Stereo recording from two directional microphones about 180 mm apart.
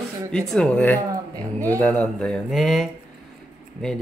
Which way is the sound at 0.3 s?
5° left (ahead or behind).